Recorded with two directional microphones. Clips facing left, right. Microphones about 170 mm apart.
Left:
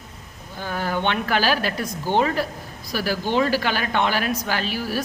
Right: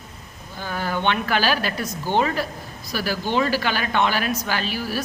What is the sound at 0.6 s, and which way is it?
A woman's voice, 50° left (ahead or behind).